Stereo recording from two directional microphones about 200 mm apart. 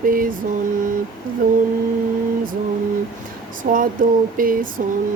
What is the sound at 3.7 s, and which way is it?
Speech, 45° right (ahead or behind).